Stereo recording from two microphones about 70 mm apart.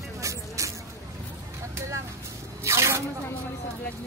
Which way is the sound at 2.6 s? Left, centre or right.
Right.